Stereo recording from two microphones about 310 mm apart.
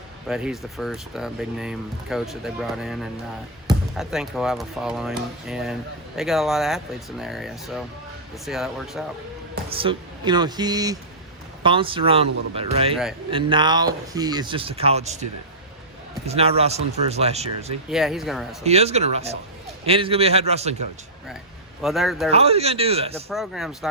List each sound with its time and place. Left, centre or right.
0.3 s speech: centre
9.6 s speech: centre
17.8 s speech: centre
18.6 s speech: centre
21.8 s speech: centre
22.3 s speech: centre
23.3 s speech: centre